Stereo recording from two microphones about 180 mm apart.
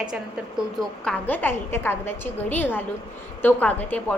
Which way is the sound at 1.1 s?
10° left (ahead or behind).